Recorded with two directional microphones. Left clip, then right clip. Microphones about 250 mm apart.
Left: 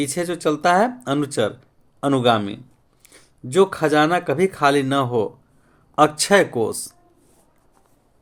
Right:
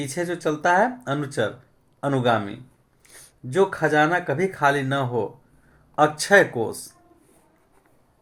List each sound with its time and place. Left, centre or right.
0.0 s speech: left